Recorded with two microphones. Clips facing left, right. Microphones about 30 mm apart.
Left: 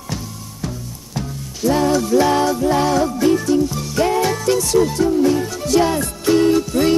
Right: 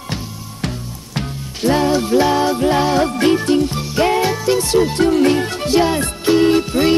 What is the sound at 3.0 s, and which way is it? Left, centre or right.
Music, right.